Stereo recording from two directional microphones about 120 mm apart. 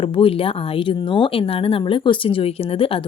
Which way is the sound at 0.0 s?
50° left (ahead or behind).